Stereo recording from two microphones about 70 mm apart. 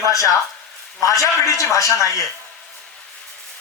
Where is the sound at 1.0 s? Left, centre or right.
Left.